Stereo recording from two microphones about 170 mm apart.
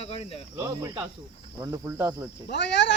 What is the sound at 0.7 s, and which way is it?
Speech, 20° right (ahead or behind).